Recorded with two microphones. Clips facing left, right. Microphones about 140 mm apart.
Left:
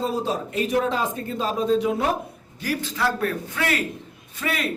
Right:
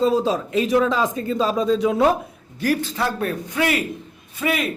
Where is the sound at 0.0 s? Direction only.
90° right.